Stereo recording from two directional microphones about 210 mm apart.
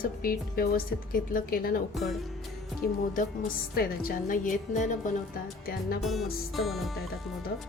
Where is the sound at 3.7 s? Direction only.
45° left (ahead or behind).